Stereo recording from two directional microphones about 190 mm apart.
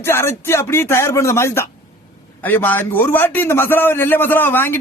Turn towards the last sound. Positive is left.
turn(degrees=10)  # may be behind; listen again after turning